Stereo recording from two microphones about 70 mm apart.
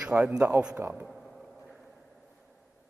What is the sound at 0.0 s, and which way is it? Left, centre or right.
Speech, centre.